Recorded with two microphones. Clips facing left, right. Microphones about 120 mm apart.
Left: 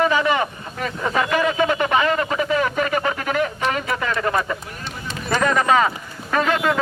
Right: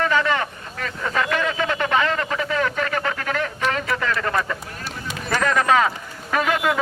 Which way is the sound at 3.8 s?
20° left (ahead or behind).